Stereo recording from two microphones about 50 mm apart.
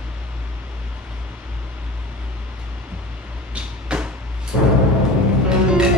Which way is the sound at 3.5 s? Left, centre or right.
Right.